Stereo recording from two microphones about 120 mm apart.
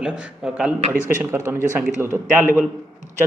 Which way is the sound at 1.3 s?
20° right (ahead or behind).